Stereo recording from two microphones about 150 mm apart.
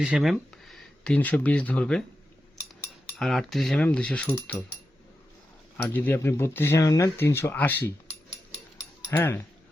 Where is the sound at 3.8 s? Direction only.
5° left (ahead or behind).